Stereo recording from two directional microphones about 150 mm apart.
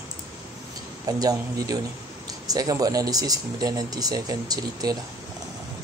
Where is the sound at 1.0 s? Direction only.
25° right (ahead or behind).